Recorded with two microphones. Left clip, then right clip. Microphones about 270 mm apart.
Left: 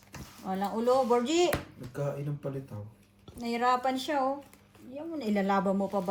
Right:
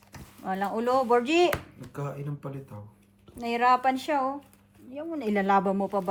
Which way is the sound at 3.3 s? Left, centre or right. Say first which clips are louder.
Right 5 dB; centre.